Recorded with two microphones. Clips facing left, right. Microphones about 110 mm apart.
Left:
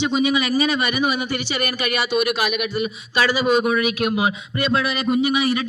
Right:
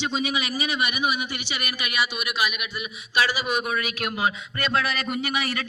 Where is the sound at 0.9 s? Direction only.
40° left (ahead or behind).